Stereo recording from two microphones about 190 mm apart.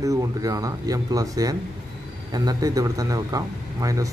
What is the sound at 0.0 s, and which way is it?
A man's voice, 20° right (ahead or behind).